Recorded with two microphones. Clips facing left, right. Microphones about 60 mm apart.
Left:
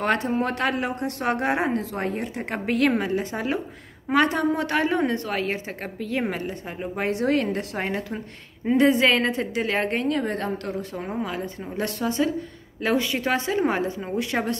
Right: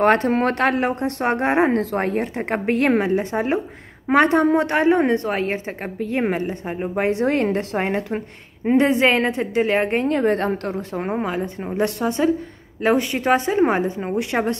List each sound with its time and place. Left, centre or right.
0.0 s a woman's voice: right
0.3 s a woman's voice: right
1.7 s a woman's voice: right
11.3 s a woman's voice: right